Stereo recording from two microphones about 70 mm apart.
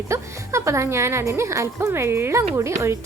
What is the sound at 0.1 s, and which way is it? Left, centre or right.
A woman's voice, right.